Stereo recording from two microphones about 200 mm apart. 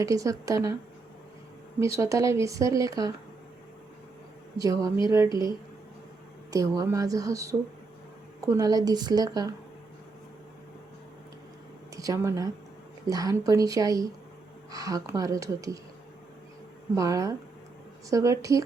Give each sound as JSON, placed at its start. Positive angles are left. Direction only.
{"t": 0.0, "sound": "speech", "side_deg": -15}
{"t": 1.8, "sound": "speech", "side_deg": -15}
{"t": 4.5, "sound": "speech", "side_deg": -15}
{"t": 5.3, "sound": "speech", "side_deg": 20}
{"t": 6.5, "sound": "a woman's voice", "side_deg": -15}
{"t": 11.9, "sound": "speech", "side_deg": -15}
{"t": 16.9, "sound": "speech", "side_deg": -15}